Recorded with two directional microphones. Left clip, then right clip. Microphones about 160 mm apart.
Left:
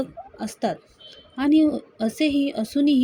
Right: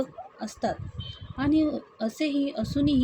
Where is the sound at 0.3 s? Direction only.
35° left (ahead or behind).